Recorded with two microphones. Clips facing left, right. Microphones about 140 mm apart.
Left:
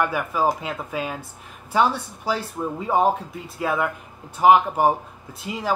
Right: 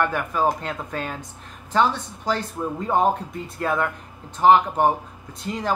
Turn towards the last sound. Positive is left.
turn(degrees=5)  # may be behind; listen again after turning